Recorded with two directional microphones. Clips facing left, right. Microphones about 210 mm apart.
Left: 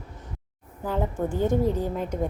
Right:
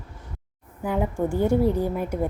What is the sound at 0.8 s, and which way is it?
A woman's voice, 10° right (ahead or behind).